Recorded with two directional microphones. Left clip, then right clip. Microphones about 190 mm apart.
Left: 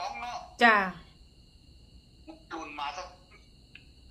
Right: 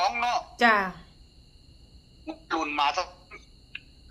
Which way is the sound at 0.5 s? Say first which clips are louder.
Left 1 dB; centre (ahead or behind).